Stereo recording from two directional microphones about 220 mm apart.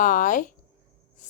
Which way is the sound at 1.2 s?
35° left (ahead or behind).